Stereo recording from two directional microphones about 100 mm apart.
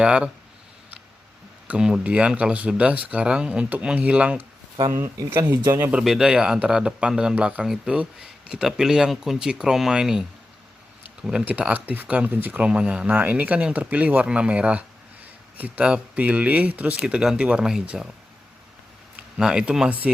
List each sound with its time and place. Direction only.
0.0 s speech: 10° right (ahead or behind)
1.6 s speech: 10° right (ahead or behind)
4.9 s speech: 25° right (ahead or behind)
5.9 s speech: 5° right (ahead or behind)
19.1 s speech: 5° right (ahead or behind)